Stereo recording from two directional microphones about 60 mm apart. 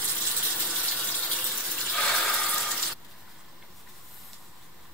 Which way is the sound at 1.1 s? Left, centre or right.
Centre.